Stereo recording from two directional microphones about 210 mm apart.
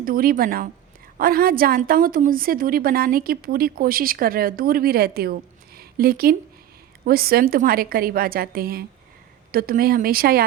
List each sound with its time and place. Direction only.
0.0 s a woman's voice: 45° right (ahead or behind)